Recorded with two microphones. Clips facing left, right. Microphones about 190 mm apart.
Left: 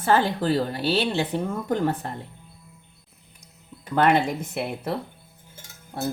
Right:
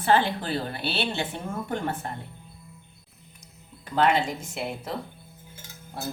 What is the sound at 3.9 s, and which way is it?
Speech, 60° left (ahead or behind).